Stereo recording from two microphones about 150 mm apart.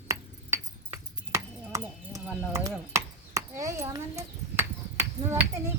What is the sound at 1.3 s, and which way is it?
Chopping, 20° right (ahead or behind).